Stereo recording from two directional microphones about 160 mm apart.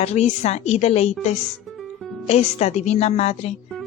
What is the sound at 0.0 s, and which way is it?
A woman's voice, 40° left (ahead or behind).